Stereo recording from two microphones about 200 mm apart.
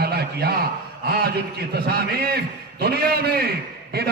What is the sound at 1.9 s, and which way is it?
A man's voice, 50° right (ahead or behind).